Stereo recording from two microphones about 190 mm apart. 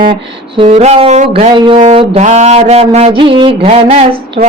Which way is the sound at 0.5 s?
30° right (ahead or behind).